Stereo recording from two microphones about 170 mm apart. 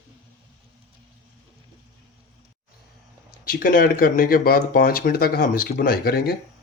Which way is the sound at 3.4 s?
55° left (ahead or behind).